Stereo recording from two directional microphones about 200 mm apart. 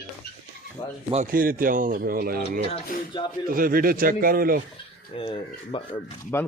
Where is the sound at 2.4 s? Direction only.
30° left (ahead or behind).